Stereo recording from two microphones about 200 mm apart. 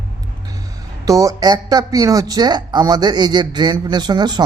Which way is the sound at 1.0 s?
15° right (ahead or behind).